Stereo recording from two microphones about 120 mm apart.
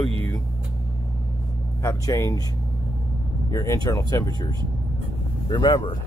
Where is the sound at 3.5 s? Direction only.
30° left (ahead or behind).